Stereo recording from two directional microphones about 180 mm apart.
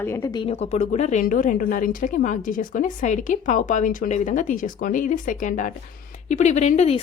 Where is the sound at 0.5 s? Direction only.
40° left (ahead or behind).